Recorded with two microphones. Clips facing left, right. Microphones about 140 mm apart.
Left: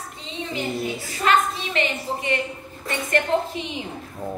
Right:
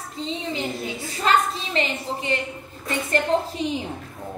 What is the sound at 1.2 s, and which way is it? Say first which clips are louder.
A woman's voice: left 1 dB; 30° right (ahead or behind).